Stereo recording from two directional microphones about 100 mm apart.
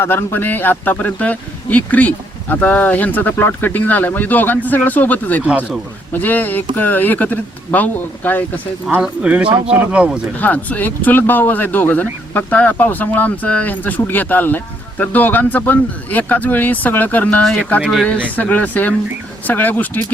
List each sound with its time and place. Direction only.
0.0 s speech: 25° left (ahead or behind)
5.5 s speech: 10° right (ahead or behind)
6.1 s speech: 15° left (ahead or behind)
9.0 s speech: 10° right (ahead or behind)
10.3 s speech: 15° left (ahead or behind)